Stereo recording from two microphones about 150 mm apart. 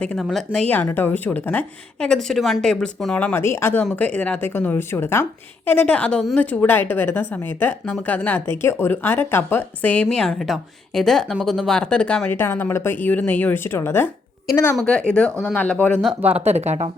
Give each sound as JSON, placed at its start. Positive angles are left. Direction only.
{"t": 0.0, "sound": "speech", "side_deg": 5}
{"t": 14.8, "sound": "speech", "side_deg": 5}
{"t": 16.2, "sound": "speech", "side_deg": -10}
{"t": 16.6, "sound": "speech", "side_deg": -50}